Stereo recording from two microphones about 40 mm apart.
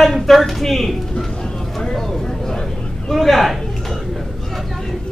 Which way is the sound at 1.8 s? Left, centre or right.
Centre.